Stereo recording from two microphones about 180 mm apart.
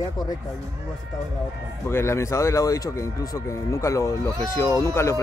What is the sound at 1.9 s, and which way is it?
Speech, 15° left (ahead or behind).